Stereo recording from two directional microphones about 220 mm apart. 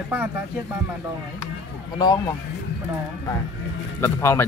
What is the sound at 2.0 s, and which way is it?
Speech, 20° left (ahead or behind).